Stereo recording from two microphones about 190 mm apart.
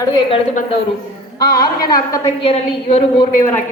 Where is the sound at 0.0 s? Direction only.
20° left (ahead or behind).